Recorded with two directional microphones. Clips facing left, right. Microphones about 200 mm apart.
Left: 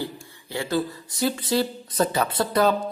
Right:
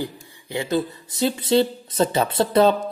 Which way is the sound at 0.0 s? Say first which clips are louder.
Right 2 dB; 15° right (ahead or behind).